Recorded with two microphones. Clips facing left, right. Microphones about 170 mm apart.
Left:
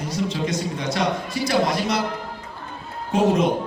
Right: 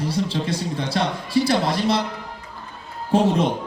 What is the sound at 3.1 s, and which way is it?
Speech, 30° right (ahead or behind).